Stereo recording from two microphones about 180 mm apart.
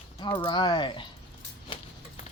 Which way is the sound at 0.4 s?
25° left (ahead or behind).